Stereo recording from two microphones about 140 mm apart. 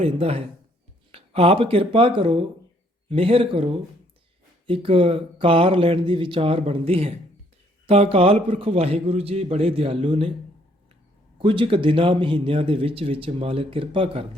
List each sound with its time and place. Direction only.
0.0 s a man's voice: 45° right (ahead or behind)
11.3 s a man's voice: 40° right (ahead or behind)